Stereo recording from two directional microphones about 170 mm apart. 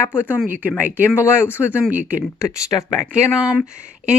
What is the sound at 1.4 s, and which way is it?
Speech, 15° left (ahead or behind).